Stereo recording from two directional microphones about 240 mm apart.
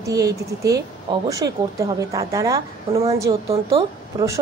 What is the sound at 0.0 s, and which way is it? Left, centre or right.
Speech, centre.